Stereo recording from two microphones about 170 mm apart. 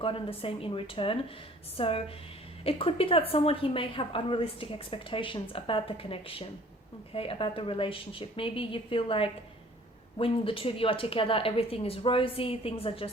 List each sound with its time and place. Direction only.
0.0 s a woman's voice: 35° left (ahead or behind)